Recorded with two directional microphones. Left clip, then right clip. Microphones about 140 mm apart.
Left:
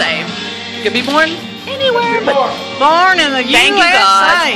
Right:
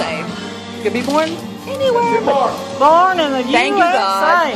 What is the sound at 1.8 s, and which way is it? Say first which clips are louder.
Speech: left 2 dB; 5° left (ahead or behind).